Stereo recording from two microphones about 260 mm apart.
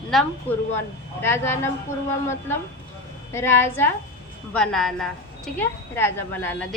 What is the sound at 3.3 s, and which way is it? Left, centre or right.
A woman's voice, centre.